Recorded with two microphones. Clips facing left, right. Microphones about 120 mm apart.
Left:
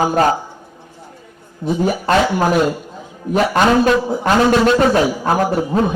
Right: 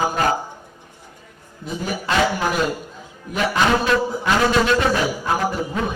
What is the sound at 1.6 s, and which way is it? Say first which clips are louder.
Speech: left 9 dB; 40° left (ahead or behind).